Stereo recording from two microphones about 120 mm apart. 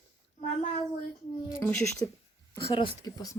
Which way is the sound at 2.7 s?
45° left (ahead or behind).